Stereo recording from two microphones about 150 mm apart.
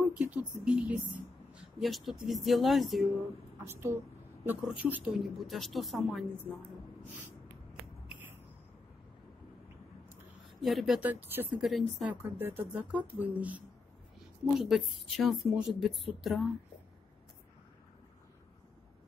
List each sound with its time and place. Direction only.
0.1 s speech: 10° right (ahead or behind)
3.6 s speech: 15° right (ahead or behind); by 6.2 s centre (ahead or behind)
8.1 s a sound: 10° right (ahead or behind)
10.6 s speech: centre (ahead or behind)
11.0 s speech: 10° right (ahead or behind)
11.5 s speech: centre (ahead or behind)
12.0 s speech: 10° right (ahead or behind)
14.6 s speech: centre (ahead or behind)